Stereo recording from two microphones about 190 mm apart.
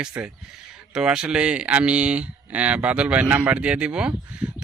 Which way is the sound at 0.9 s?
5° right (ahead or behind).